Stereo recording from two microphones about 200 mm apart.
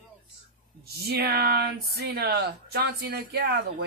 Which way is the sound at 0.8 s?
50° right (ahead or behind).